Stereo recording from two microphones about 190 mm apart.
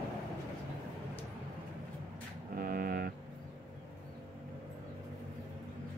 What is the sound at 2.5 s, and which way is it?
Music, 50° right (ahead or behind).